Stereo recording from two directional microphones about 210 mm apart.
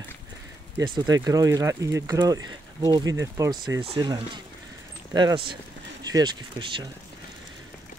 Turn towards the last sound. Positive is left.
turn(degrees=-20)  # may be behind; listen again after turning